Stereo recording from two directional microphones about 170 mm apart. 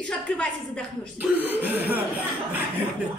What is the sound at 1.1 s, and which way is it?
Speech, 10° right (ahead or behind).